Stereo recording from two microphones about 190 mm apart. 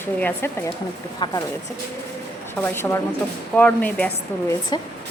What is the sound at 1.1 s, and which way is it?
Speech, 25° left (ahead or behind).